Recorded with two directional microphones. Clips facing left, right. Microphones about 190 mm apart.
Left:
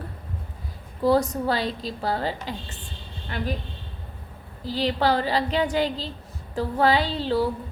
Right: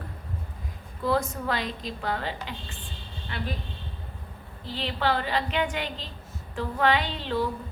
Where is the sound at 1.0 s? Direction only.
35° left (ahead or behind).